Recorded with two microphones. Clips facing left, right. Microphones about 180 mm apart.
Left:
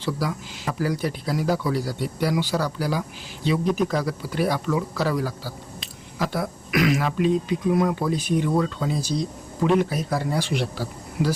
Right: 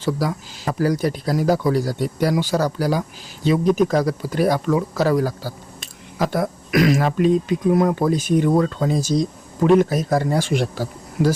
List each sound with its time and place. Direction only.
0.0 s speech: 40° right (ahead or behind)